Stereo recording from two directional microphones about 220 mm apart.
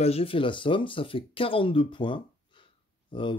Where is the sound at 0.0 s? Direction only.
25° left (ahead or behind).